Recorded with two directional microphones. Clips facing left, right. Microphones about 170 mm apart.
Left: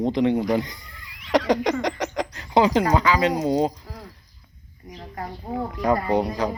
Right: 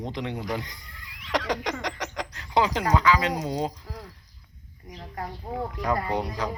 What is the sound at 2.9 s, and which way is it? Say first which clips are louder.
Speech: left 3 dB; 30° left (ahead or behind).